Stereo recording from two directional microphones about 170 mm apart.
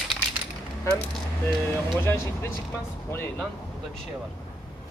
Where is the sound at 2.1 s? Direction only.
15° left (ahead or behind).